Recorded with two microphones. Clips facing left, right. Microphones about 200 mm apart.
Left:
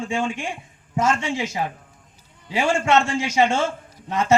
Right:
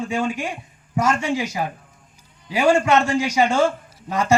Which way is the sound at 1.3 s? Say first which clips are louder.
Right 3 dB; 25° left (ahead or behind).